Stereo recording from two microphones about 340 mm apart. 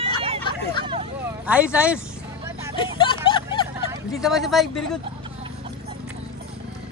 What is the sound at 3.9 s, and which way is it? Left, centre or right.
Speech, centre.